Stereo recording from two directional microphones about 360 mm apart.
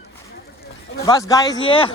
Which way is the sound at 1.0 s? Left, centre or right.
Centre.